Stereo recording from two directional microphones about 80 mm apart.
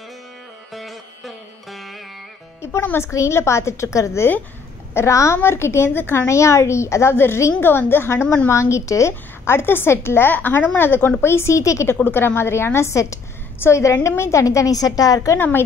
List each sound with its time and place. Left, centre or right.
0.7 s music: centre
2.6 s a woman's voice: left
12.0 s a woman's voice: left
15.3 s a woman's voice: left